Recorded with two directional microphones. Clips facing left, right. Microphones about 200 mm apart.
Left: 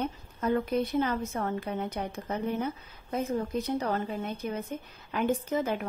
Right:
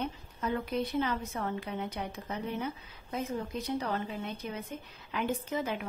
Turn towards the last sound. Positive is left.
turn(degrees=45)  # may be behind; listen again after turning